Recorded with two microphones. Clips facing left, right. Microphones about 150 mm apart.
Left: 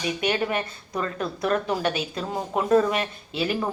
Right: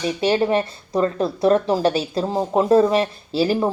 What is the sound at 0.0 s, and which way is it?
Speech, 30° right (ahead or behind).